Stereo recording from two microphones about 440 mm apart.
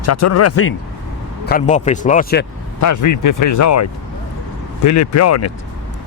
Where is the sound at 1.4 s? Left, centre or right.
Centre.